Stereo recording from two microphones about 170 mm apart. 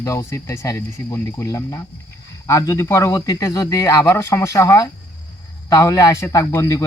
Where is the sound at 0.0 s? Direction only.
20° left (ahead or behind).